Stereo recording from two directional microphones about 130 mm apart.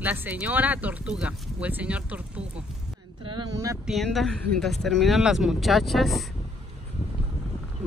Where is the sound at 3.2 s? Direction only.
35° right (ahead or behind).